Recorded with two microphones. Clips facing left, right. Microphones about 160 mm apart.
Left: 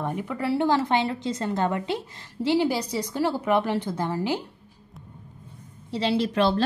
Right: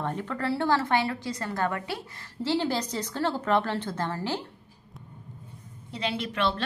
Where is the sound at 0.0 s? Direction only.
10° left (ahead or behind).